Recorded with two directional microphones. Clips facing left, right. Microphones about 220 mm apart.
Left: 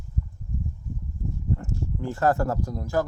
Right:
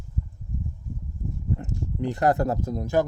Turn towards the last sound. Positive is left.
turn(degrees=-20)  # may be behind; listen again after turning